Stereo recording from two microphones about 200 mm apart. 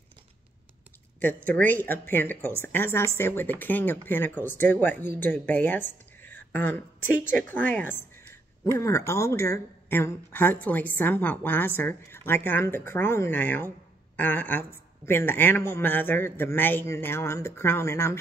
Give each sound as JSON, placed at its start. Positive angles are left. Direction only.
{"t": 1.2, "sound": "speech", "side_deg": 10}